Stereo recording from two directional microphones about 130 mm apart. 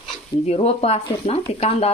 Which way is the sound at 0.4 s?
55° left (ahead or behind).